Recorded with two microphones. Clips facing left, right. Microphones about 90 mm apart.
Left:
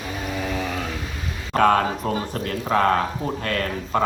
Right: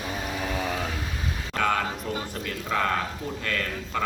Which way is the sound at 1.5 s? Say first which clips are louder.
Left 8 dB; 40° left (ahead or behind).